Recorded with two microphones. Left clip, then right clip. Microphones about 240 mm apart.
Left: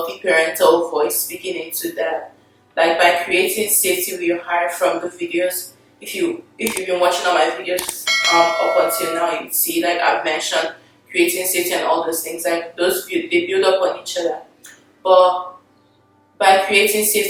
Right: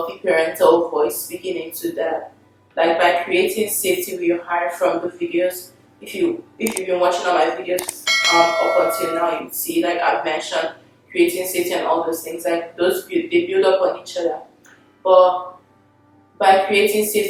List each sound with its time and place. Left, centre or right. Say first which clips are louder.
0.3 s a woman's voice: left 1 dB; centre
0.7 s speech: even; right
0.9 s a woman's voice: even; centre
2.7 s a woman's voice: left 2 dB; centre
11.8 s a woman's voice: left 1 dB; centre
12.2 s a woman's voice: left 1 dB; centre
15.2 s speech: even; right
16.4 s speech: left 1 dB; centre